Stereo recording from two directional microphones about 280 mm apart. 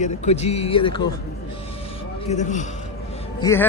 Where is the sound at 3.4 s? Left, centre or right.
Centre.